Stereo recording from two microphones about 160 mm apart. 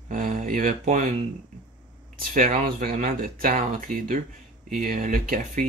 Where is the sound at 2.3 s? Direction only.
60° right (ahead or behind).